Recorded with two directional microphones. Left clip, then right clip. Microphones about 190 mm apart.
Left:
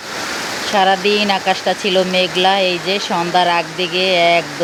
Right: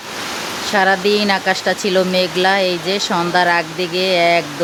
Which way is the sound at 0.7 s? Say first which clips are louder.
Left 1 dB; 10° right (ahead or behind).